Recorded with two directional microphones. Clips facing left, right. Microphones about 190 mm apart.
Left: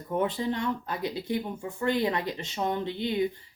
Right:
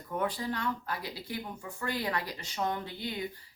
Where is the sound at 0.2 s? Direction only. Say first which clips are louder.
Left 4 dB; 25° left (ahead or behind).